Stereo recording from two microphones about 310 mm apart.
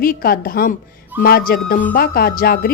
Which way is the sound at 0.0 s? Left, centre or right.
Left.